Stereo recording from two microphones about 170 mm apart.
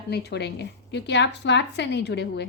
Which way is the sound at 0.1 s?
75° left (ahead or behind).